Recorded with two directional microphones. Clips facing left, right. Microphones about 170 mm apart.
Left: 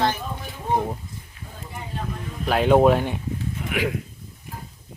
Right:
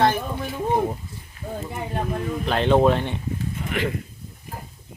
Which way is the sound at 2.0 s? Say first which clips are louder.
Right 4 dB; 60° right (ahead or behind).